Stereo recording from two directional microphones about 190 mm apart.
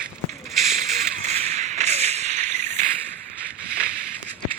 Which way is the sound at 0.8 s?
35° right (ahead or behind).